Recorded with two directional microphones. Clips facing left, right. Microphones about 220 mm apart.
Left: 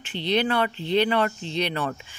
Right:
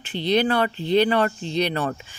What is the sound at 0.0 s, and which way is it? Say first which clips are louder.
Speech: right 3 dB; 40° right (ahead or behind).